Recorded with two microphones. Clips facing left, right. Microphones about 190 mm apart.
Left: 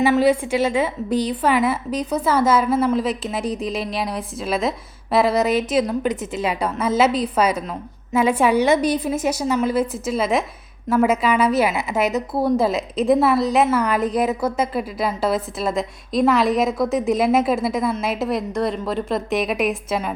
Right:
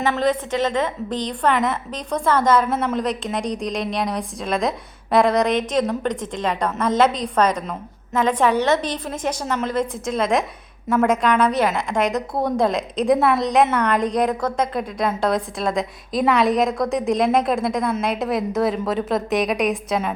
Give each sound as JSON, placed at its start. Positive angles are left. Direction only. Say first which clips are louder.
{"t": 0.0, "sound": "a woman's voice", "louder": "left 4 dB", "side_deg": 10}